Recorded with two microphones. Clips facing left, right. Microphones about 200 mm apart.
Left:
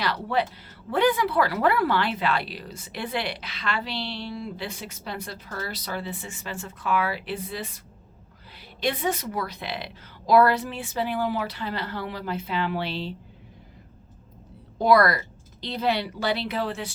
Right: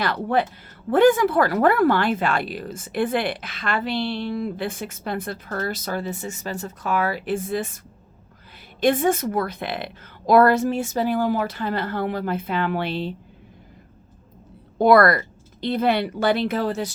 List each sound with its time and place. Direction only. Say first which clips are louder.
0.0 s speech: right 4 dB; 50° right (ahead or behind)
8.8 s speech: right 7 dB; 50° right (ahead or behind)
14.8 s speech: right 4 dB; 55° right (ahead or behind)